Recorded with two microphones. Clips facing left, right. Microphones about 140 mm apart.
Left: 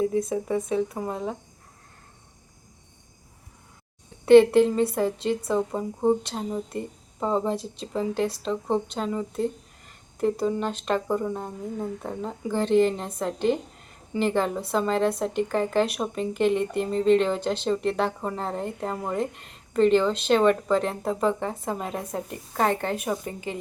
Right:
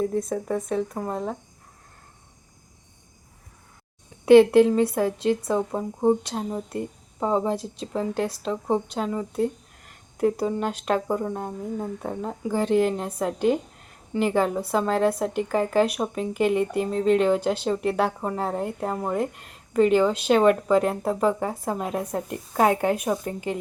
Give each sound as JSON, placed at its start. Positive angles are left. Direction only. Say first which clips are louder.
{"t": 0.0, "sound": "speech", "louder": "left 1 dB", "side_deg": 0}
{"t": 4.3, "sound": "speech", "louder": "right 1 dB", "side_deg": -5}